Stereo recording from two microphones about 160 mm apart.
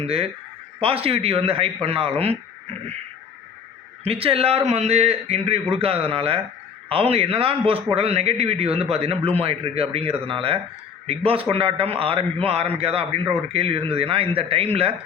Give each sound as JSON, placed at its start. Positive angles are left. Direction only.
{"t": 0.0, "sound": "a man's voice", "side_deg": -40}
{"t": 4.0, "sound": "a man's voice", "side_deg": -35}